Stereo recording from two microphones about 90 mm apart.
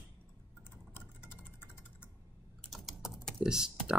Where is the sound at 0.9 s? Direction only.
25° left (ahead or behind).